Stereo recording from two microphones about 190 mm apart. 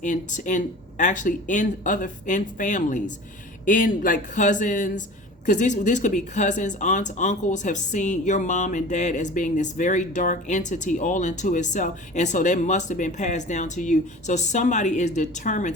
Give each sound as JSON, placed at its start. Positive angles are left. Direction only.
{"t": 0.0, "sound": "a man's voice", "side_deg": 40}